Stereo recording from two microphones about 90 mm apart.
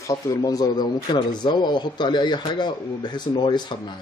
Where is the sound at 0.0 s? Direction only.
40° left (ahead or behind).